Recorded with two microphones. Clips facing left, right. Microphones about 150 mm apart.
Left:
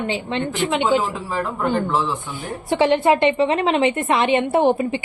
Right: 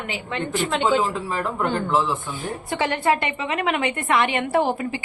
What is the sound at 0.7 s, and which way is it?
A woman's voice, centre (ahead or behind).